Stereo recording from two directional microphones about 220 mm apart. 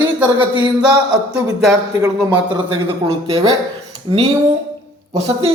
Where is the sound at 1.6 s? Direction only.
5° right (ahead or behind).